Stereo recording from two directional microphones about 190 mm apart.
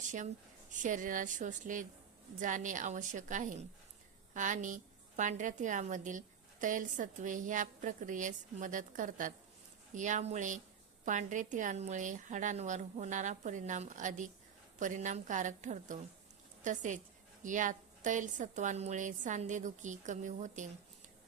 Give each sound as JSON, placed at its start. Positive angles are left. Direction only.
{"t": 0.7, "sound": "a woman's voice", "side_deg": -40}